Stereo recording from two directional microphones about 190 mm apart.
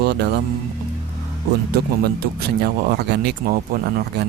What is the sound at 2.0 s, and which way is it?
Speech, 55° right (ahead or behind).